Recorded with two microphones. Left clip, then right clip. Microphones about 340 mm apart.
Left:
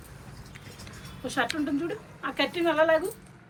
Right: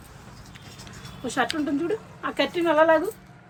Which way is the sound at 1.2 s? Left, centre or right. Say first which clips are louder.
Right 3 dB; right.